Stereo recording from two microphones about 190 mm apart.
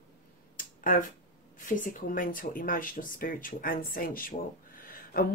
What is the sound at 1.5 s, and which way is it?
Speech, 45° left (ahead or behind).